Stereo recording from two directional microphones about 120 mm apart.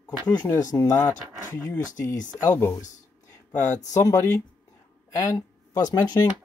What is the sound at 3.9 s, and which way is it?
Speech, 25° left (ahead or behind).